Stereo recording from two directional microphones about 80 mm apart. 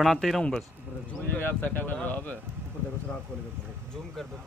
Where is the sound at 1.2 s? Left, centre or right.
Left.